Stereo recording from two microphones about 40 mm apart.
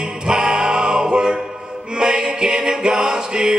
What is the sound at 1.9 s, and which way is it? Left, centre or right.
A capella, centre.